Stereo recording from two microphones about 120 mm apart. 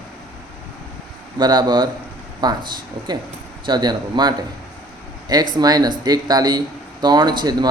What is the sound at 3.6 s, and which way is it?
A man's voice, 35° right (ahead or behind).